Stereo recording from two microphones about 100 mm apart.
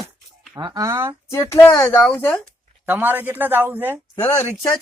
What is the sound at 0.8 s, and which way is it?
Speech, 25° right (ahead or behind).